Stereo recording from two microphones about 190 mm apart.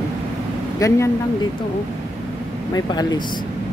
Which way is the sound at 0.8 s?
20° left (ahead or behind).